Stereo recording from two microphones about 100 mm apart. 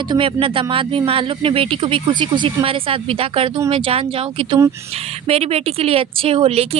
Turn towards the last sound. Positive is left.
turn(degrees=-75)  # may be behind; listen again after turning